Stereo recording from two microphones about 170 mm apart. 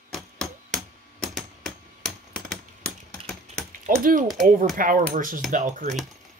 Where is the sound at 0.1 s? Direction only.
Centre (ahead or behind).